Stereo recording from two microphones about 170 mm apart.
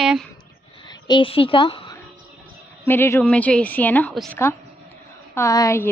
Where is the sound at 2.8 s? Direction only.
15° left (ahead or behind).